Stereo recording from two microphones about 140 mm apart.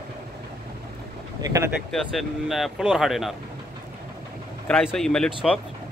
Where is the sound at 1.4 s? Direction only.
25° right (ahead or behind).